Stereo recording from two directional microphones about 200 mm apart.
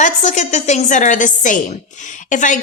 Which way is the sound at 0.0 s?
35° left (ahead or behind).